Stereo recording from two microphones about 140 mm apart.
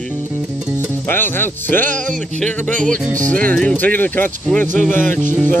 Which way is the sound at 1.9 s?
65° right (ahead or behind).